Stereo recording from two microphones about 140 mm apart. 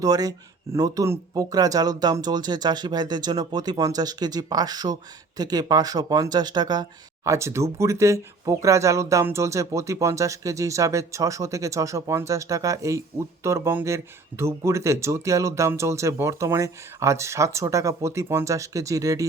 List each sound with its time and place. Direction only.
0.0 s speech: 25° right (ahead or behind)
7.3 s speech: 20° right (ahead or behind)